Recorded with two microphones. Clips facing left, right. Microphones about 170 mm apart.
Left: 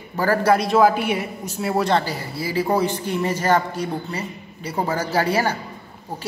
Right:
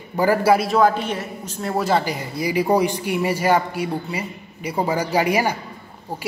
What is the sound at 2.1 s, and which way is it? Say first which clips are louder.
A woman's voice: right 3 dB; 15° right (ahead or behind).